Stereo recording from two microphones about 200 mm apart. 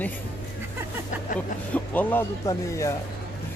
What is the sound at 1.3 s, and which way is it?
Speech, 10° left (ahead or behind).